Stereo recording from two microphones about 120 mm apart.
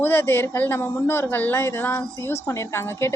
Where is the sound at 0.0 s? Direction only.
20° left (ahead or behind).